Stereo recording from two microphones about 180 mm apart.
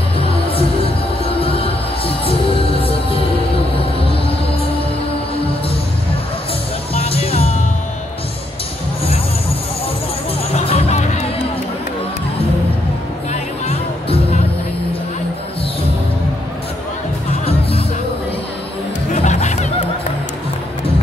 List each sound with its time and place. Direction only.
0.2 s music: 30° left (ahead or behind)
6.9 s music: 35° left (ahead or behind)
10.5 s music: 35° left (ahead or behind)
13.3 s music: 35° left (ahead or behind)
19.1 s music: 40° left (ahead or behind)